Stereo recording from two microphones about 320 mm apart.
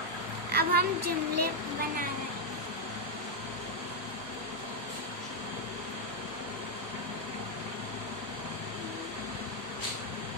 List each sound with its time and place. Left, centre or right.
0.5 s a woman's voice: right
1.0 s speech: right